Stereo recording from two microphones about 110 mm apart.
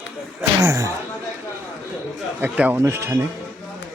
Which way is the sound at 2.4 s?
15° right (ahead or behind).